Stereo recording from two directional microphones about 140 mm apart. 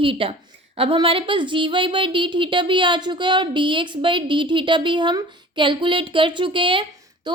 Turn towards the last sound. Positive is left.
turn(degrees=-30)  # may be behind; listen again after turning